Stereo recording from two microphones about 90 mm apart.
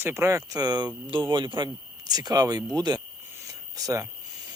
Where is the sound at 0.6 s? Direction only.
50° right (ahead or behind).